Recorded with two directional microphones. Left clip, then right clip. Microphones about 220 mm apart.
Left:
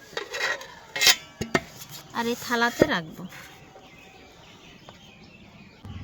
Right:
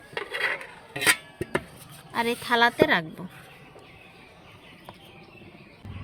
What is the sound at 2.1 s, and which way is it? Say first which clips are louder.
Speech: right 3 dB; 25° right (ahead or behind).